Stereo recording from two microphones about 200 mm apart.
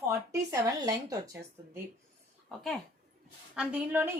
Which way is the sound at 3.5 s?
5° right (ahead or behind).